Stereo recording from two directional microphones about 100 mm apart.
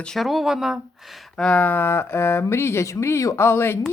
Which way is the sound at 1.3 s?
10° left (ahead or behind).